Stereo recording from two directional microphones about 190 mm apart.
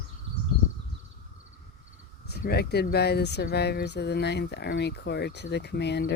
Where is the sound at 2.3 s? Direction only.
55° left (ahead or behind).